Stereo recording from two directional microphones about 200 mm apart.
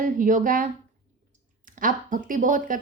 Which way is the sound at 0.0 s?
40° right (ahead or behind).